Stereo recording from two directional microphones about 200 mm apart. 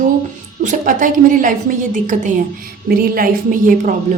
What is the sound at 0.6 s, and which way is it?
A woman's voice, 40° right (ahead or behind).